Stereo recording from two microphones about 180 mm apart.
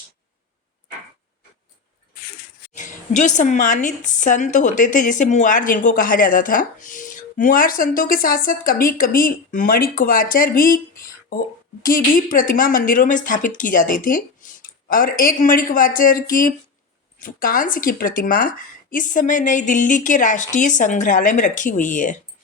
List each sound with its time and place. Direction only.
2.7 s speech: 45° left (ahead or behind)